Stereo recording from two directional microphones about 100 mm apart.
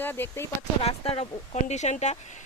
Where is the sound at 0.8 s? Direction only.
80° left.